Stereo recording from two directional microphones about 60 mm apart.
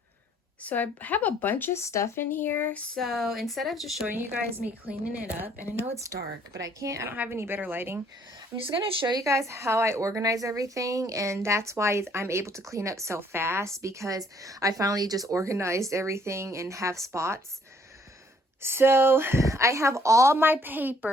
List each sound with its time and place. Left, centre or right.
0.6 s speech: left
1.7 s speech: left
2.3 s a sound: left
2.9 s speech: centre
4.0 s a woman's voice: right
4.6 s a woman's voice: right
6.0 s a woman's voice: right
7.0 s a woman's voice: right
9.1 s a woman's voice: right
15.3 s a woman's voice: right
18.6 s a woman's voice: right
19.4 s a woman's voice: right
20.3 s a woman's voice: right